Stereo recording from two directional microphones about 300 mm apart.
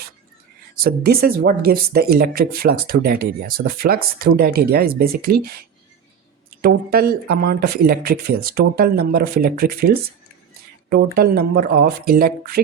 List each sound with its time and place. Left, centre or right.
0.9 s speech: right